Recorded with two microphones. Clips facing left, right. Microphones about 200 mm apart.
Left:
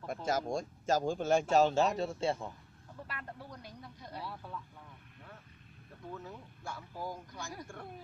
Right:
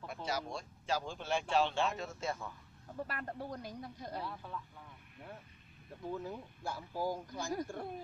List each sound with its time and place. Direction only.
0.0 s a man's voice: 45° left (ahead or behind); by 2.5 s 30° left (ahead or behind)
3.1 s speech: 45° right (ahead or behind)
4.2 s speech: centre (ahead or behind)
6.1 s speech: 30° right (ahead or behind)